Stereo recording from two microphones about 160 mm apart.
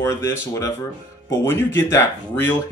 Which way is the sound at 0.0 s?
15° left (ahead or behind).